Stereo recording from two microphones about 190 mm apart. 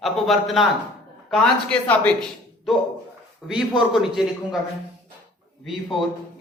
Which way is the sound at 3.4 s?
5° right (ahead or behind).